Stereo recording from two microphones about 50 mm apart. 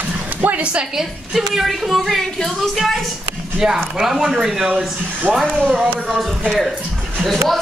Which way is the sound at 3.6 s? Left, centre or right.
Centre.